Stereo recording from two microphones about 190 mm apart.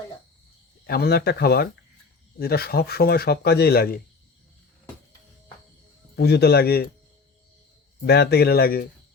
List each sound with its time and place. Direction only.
0.9 s speech: 55° left (ahead or behind)
6.1 s speech: 60° left (ahead or behind)
8.0 s speech: 60° left (ahead or behind)